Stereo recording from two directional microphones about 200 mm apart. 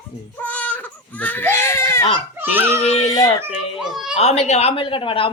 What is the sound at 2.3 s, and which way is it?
Speech, 10° right (ahead or behind).